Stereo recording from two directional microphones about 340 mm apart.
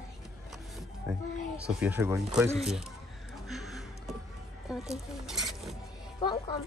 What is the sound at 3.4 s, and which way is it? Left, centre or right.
Music, centre.